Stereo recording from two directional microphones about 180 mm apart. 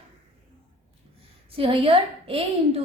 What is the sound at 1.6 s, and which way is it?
A woman's voice, 30° right (ahead or behind).